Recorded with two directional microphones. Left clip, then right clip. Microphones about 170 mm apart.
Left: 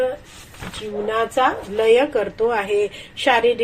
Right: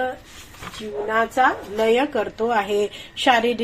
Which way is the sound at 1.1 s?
20° right (ahead or behind).